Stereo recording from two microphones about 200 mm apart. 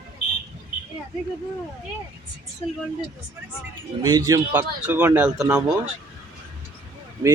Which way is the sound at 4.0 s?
20° right (ahead or behind).